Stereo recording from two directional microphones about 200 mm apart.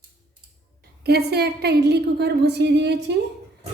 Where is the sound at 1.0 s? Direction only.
55° right (ahead or behind).